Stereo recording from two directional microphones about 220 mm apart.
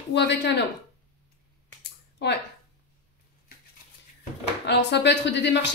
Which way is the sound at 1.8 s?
50° left (ahead or behind).